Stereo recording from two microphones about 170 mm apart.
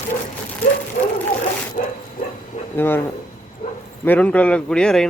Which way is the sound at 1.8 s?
50° left (ahead or behind).